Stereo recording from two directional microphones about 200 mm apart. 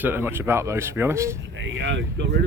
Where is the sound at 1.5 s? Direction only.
65° right (ahead or behind).